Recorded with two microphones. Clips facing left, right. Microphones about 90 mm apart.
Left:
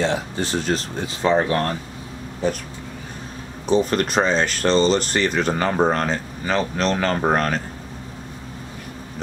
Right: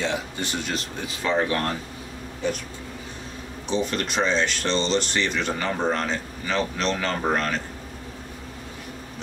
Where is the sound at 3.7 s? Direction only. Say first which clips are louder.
Left 7 dB; 45° left (ahead or behind).